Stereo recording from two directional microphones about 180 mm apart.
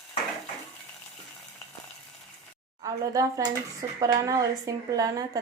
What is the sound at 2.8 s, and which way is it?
A woman's voice, 20° right (ahead or behind).